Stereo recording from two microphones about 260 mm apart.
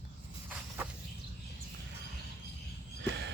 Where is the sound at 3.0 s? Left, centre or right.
Right.